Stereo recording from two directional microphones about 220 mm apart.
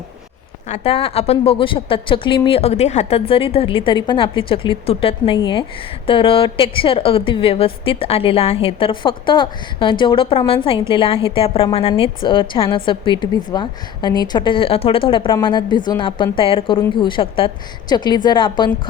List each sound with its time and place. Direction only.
0.7 s a woman's voice: 25° left (ahead or behind)